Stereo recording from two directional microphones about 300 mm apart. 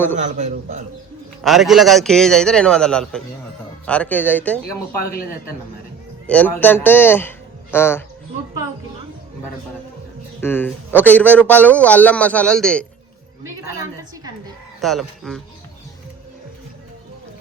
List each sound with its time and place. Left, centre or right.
0.2 s a man's voice: right
1.5 s a man's voice: centre
6.2 s speech: centre
10.4 s a man's voice: centre
14.8 s a man's voice: centre